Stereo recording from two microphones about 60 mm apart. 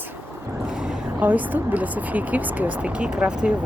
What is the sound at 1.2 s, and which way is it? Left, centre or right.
Speech, right.